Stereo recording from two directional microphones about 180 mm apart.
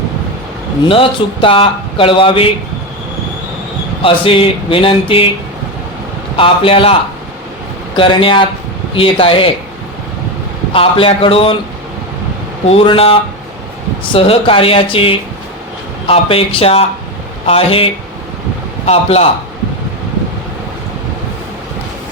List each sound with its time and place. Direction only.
0.9 s speech: 30° left (ahead or behind)
4.0 s speech: 30° left (ahead or behind)
6.3 s speech: 30° left (ahead or behind)
7.9 s speech: 30° left (ahead or behind)
10.7 s speech: 30° left (ahead or behind)
12.6 s speech: 30° left (ahead or behind)